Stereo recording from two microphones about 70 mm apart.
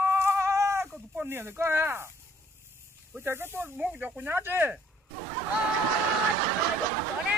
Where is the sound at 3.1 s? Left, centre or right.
Right.